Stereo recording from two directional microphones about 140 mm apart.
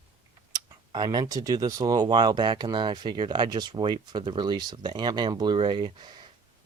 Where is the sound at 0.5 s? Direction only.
30° right (ahead or behind).